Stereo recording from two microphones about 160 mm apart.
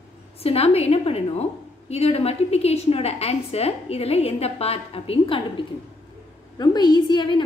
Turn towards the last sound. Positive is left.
turn(degrees=30)  # may be behind; listen again after turning